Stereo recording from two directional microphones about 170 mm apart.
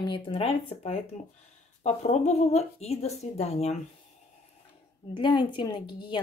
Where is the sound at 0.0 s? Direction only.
30° left (ahead or behind).